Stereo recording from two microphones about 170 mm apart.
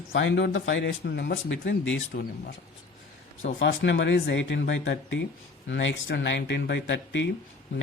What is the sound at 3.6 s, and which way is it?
Speech, 90° left.